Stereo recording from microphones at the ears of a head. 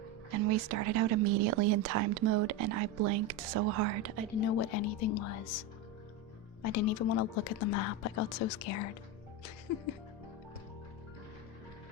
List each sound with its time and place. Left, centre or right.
0.3 s a woman's voice: right
4.4 s speech: left